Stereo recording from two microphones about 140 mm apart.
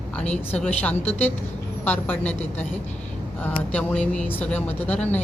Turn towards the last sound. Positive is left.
turn(degrees=10)  # may be behind; listen again after turning